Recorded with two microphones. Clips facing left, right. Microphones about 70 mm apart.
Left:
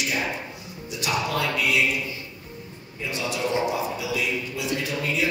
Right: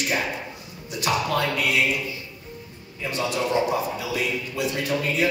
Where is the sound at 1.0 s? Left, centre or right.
Right.